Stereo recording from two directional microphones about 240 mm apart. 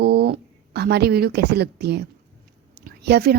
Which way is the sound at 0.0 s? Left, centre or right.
Right.